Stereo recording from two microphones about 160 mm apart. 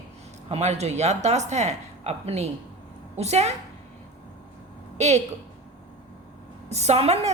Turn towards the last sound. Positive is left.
turn(degrees=-40)  # may be behind; listen again after turning